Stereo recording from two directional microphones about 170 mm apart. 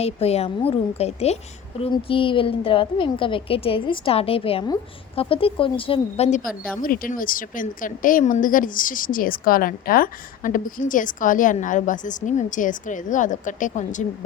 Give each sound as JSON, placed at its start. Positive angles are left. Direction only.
{"t": 0.0, "sound": "a woman's voice", "side_deg": 35}
{"t": 6.8, "sound": "speech", "side_deg": 55}